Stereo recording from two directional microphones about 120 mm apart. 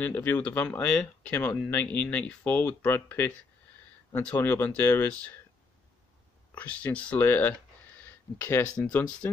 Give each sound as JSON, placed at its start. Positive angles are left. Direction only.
{"t": 0.0, "sound": "speech", "side_deg": 15}
{"t": 6.5, "sound": "speech", "side_deg": 15}
{"t": 8.0, "sound": "a sound", "side_deg": 15}
{"t": 8.7, "sound": "speech", "side_deg": 10}